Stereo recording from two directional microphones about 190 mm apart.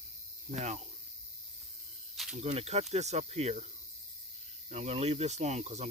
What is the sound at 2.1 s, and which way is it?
Cricket, centre (ahead or behind).